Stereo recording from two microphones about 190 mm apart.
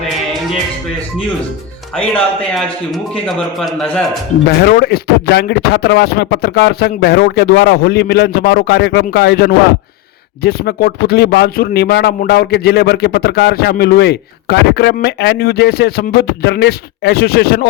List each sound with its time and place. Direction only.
2.1 s a man's voice: centre (ahead or behind)
4.6 s speech: 55° left (ahead or behind)